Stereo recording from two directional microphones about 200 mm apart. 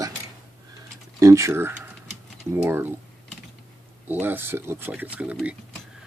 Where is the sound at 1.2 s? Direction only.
15° right (ahead or behind).